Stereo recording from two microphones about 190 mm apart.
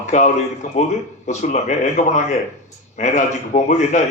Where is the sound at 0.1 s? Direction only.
40° left (ahead or behind).